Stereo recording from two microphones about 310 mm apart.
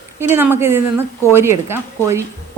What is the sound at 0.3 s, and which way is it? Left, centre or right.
Speech, centre.